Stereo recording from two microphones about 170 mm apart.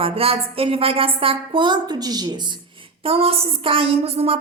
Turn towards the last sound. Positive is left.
turn(degrees=-35)  # may be behind; listen again after turning